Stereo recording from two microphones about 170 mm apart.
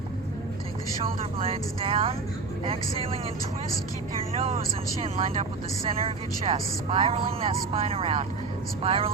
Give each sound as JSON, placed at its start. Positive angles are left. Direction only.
{"t": 1.0, "sound": "speech", "side_deg": -35}
{"t": 4.2, "sound": "speech", "side_deg": -35}